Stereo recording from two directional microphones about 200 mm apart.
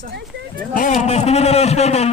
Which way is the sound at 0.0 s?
50° right (ahead or behind).